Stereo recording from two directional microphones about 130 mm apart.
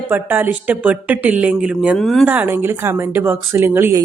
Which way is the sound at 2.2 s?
15° right (ahead or behind).